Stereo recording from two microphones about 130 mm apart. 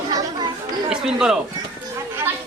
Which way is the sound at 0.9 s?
5° right (ahead or behind).